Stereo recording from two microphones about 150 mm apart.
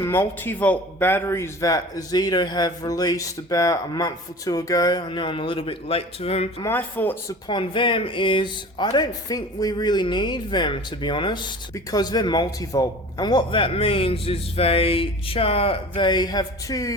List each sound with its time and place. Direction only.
0.0 s speech: 15° left (ahead or behind); by 6.5 s 45° left (ahead or behind)
6.7 s speech: 10° left (ahead or behind)
7.4 s speech: 35° left (ahead or behind)